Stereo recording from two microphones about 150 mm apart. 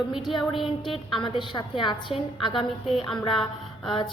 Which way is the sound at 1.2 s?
35° left (ahead or behind).